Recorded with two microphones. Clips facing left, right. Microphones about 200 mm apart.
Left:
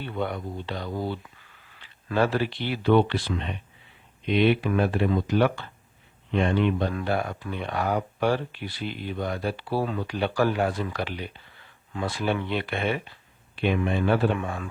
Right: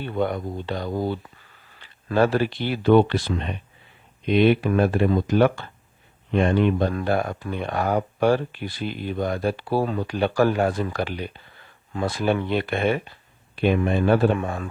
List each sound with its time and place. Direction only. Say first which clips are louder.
0.0 s speech: right 5 dB; 45° right (ahead or behind)